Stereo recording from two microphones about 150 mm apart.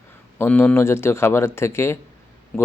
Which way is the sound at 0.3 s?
10° left (ahead or behind).